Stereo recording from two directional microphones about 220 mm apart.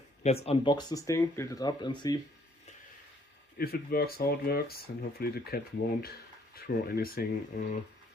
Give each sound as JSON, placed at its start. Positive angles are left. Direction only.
{"t": 0.2, "sound": "speech", "side_deg": 30}
{"t": 3.6, "sound": "speech", "side_deg": 45}